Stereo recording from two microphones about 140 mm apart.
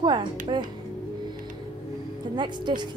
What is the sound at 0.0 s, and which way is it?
Speech, 35° right (ahead or behind).